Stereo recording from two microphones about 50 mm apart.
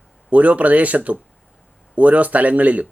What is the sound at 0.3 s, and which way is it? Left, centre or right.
Speech, right.